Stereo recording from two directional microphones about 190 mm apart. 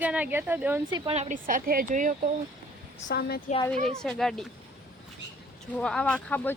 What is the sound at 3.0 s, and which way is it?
Speech, 55° left (ahead or behind).